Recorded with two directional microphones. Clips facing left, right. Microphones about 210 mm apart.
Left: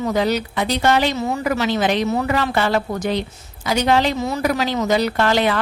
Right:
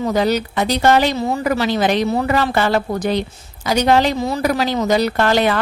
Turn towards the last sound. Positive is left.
turn(degrees=-45)  # may be behind; listen again after turning